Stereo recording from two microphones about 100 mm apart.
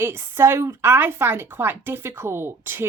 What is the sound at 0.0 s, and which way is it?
A woman's voice, 25° right (ahead or behind).